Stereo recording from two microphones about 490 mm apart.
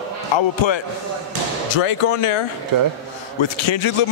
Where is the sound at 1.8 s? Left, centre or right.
Left.